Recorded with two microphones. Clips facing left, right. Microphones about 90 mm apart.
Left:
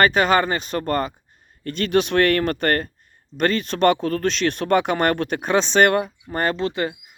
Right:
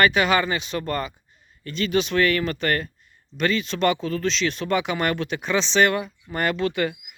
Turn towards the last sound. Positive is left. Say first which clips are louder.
# even
turn(degrees=30)  # may be behind; listen again after turning